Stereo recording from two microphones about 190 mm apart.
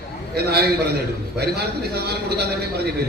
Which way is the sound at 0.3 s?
55° right (ahead or behind).